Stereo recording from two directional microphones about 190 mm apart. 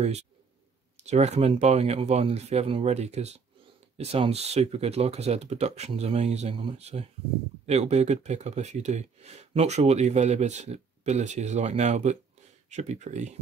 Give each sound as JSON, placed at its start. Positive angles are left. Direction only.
{"t": 1.0, "sound": "speech", "side_deg": -35}